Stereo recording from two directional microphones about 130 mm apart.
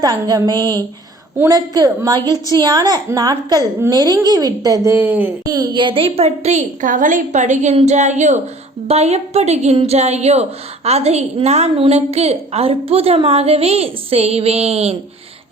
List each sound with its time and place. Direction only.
0.0 s a woman's voice: 25° right (ahead or behind)
5.5 s a woman's voice: 30° right (ahead or behind); by 14.9 s 50° right (ahead or behind)